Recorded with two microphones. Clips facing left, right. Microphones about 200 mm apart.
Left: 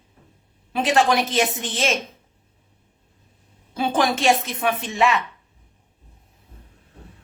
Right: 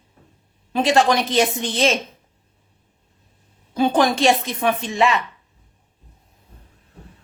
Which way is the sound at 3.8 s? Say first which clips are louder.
Right 4 dB; centre (ahead or behind).